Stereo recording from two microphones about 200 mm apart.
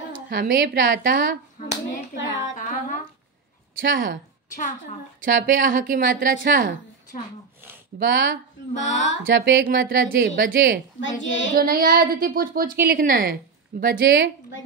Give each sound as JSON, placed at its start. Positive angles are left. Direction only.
{"t": 0.3, "sound": "a woman's voice", "side_deg": -55}
{"t": 1.7, "sound": "hands", "side_deg": 65}
{"t": 2.5, "sound": "music", "side_deg": 40}
{"t": 3.8, "sound": "a woman's voice", "side_deg": -60}
{"t": 4.5, "sound": "a woman's voice", "side_deg": 40}
{"t": 5.2, "sound": "a woman's voice", "side_deg": -45}
{"t": 7.1, "sound": "a woman's voice", "side_deg": 40}
{"t": 8.0, "sound": "a woman's voice", "side_deg": -60}
{"t": 8.7, "sound": "a woman's voice", "side_deg": 35}
{"t": 9.2, "sound": "a woman's voice", "side_deg": -55}
{"t": 11.0, "sound": "speech", "side_deg": 70}
{"t": 11.5, "sound": "a woman's voice", "side_deg": -45}